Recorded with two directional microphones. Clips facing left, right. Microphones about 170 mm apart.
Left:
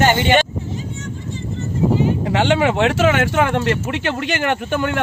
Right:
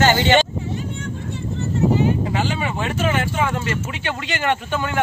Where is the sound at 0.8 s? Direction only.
60° right (ahead or behind).